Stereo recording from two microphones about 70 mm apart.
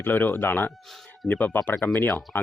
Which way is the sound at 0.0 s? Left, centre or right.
Left.